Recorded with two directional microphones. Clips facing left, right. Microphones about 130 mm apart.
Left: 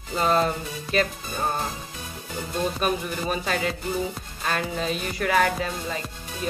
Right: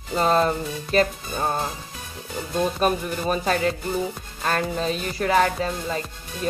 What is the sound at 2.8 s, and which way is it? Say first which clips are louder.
Music: right 3 dB; 40° right (ahead or behind).